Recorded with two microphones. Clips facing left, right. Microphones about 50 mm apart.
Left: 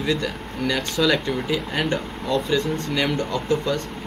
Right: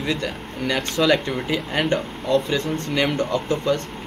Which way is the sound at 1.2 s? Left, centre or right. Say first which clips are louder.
Even; right.